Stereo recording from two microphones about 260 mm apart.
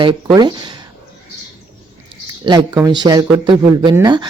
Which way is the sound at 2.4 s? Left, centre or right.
Centre.